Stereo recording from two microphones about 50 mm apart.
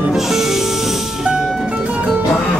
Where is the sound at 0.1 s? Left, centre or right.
Centre.